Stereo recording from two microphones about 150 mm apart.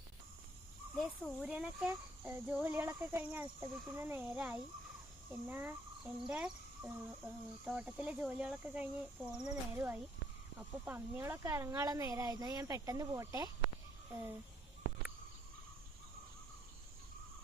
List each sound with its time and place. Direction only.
0.9 s a child's voice: centre (ahead or behind)